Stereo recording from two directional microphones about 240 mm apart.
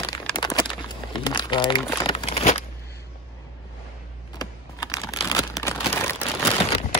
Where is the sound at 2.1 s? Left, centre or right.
Left.